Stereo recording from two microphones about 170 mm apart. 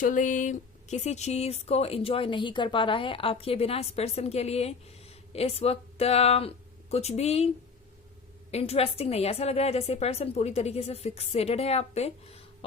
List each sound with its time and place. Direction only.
0.0 s speech: 50° left (ahead or behind)